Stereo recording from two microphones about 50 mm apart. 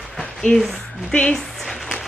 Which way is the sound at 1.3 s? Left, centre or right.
Centre.